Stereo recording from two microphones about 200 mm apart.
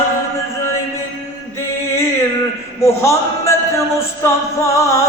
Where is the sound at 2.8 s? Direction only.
15° left (ahead or behind).